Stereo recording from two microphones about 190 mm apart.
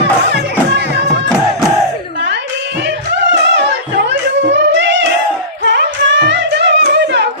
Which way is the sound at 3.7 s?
70° right (ahead or behind).